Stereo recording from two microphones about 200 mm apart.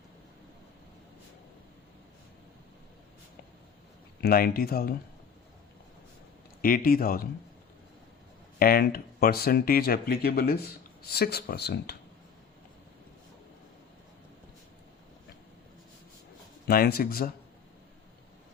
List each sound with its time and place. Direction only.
4.2 s speech: 50° left (ahead or behind)
6.6 s speech: 45° left (ahead or behind)
8.5 s speech: 50° left (ahead or behind)
16.6 s speech: 50° left (ahead or behind)